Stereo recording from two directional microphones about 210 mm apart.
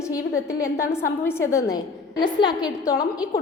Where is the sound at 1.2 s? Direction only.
10° left (ahead or behind).